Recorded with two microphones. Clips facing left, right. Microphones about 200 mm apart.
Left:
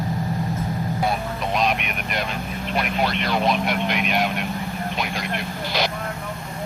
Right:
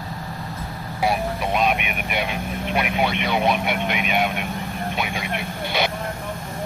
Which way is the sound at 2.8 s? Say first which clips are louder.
Right 1 dB; 60° right (ahead or behind).